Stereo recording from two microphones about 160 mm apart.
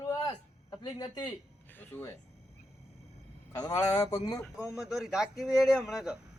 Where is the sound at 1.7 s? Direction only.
10° left (ahead or behind).